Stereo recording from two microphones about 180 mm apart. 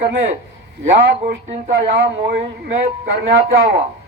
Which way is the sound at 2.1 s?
70° right (ahead or behind).